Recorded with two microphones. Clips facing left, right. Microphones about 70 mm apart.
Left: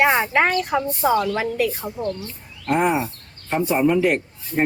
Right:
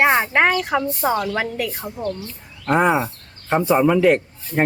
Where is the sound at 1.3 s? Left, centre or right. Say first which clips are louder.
Left 2 dB; right.